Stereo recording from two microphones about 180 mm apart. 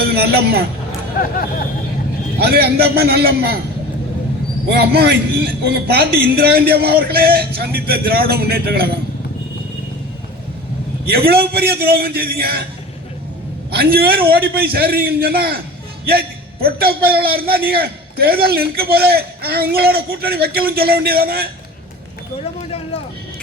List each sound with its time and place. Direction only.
0.1 s a man's voice: 60° right (ahead or behind)
1.2 s speech: 55° left (ahead or behind)
2.4 s a man's voice: 60° right (ahead or behind)
4.7 s a man's voice: 60° right (ahead or behind)
11.0 s a man's voice: 60° right (ahead or behind)
13.7 s a man's voice: 60° right (ahead or behind)